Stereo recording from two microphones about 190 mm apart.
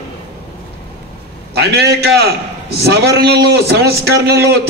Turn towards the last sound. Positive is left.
turn(degrees=-60)  # may be behind; listen again after turning